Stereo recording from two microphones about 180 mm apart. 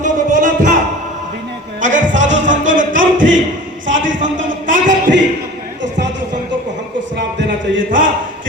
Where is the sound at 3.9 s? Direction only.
45° right (ahead or behind).